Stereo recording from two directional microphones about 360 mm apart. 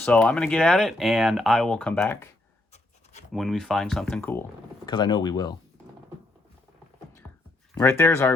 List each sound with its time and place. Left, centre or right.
0.0 s speech: centre
2.7 s writing: centre
3.3 s speech: centre
7.8 s speech: centre